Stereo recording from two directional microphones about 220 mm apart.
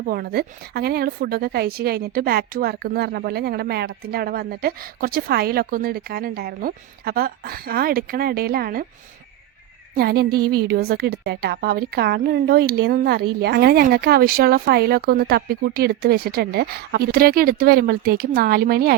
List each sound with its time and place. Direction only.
0.1 s a woman's voice: 45° right (ahead or behind)
10.0 s a woman's voice: 45° right (ahead or behind)